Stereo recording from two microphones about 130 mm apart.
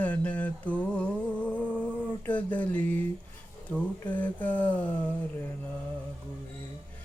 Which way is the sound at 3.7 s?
10° left (ahead or behind).